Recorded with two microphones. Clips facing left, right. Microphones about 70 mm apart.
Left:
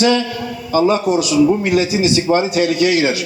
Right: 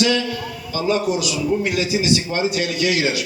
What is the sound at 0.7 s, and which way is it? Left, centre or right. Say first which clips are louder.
A man's voice: left 6 dB; left.